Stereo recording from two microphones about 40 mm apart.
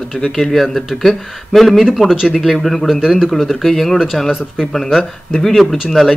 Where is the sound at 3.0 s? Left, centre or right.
Centre.